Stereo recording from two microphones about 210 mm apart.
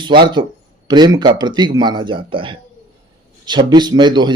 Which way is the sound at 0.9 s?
20° right (ahead or behind).